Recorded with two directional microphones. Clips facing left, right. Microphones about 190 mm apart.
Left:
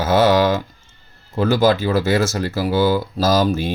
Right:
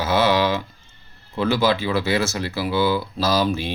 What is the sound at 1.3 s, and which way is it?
Speech, 45° left (ahead or behind).